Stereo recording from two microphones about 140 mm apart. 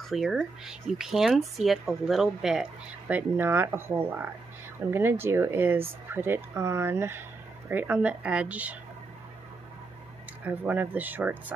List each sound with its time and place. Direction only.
0.1 s speech: centre (ahead or behind)
10.4 s speech: 10° right (ahead or behind)